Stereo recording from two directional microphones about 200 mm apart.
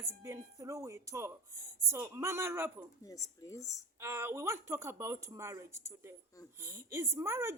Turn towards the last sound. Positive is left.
turn(degrees=-15)  # may be behind; listen again after turning